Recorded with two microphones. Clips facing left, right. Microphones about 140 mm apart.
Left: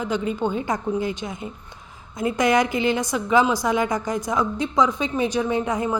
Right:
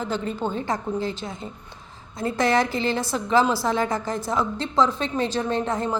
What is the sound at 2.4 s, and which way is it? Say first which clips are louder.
Speech: left 2 dB; 30° right (ahead or behind).